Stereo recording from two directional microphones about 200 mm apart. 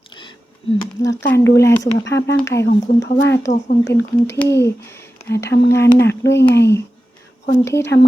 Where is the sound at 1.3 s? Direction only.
15° left (ahead or behind).